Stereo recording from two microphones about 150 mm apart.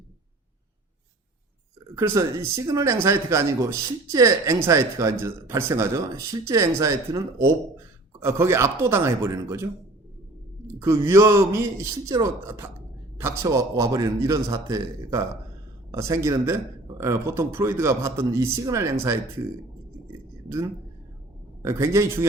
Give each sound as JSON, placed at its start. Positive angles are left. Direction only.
{"t": 2.0, "sound": "speech", "side_deg": -20}
{"t": 10.8, "sound": "a man's voice", "side_deg": -20}
{"t": 21.6, "sound": "speech", "side_deg": -20}